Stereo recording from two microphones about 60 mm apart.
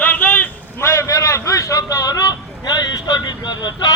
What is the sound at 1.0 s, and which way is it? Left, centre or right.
A man's voice, left.